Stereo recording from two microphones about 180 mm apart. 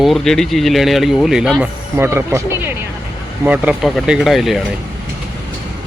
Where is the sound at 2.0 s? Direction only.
15° right (ahead or behind).